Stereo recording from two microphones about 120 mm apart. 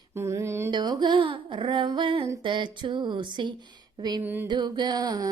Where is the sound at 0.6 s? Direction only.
35° right (ahead or behind).